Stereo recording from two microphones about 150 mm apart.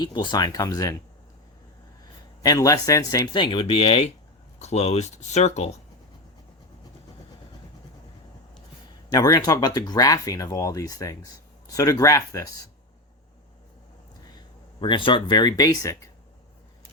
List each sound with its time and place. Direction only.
0.0 s speech: 30° left (ahead or behind)
2.4 s speech: 25° left (ahead or behind); by 5.7 s 45° left (ahead or behind)
9.0 s speech: 25° left (ahead or behind)
14.3 s speech: 30° left (ahead or behind)